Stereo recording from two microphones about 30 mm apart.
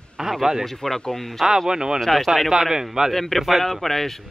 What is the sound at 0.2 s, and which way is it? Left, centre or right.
Speech, centre.